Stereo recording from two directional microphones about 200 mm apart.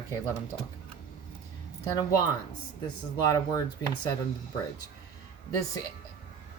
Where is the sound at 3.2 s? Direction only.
20° left (ahead or behind).